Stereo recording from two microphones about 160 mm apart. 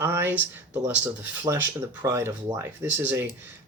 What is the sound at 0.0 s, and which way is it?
Speech, 15° right (ahead or behind).